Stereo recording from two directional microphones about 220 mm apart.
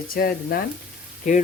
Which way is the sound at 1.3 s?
35° left (ahead or behind).